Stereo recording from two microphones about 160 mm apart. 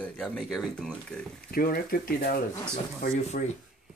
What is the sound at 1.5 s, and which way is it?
Speech, 65° left (ahead or behind).